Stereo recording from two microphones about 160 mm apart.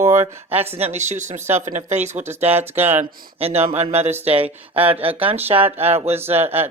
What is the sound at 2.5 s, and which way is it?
Speech, 10° right (ahead or behind).